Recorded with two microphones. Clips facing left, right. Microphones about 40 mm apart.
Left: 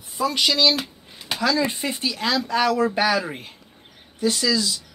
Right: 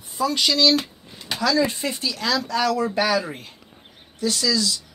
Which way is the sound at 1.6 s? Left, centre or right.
Centre.